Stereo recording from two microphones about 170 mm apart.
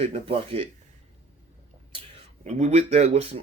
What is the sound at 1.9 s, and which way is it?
Speech, 35° right (ahead or behind).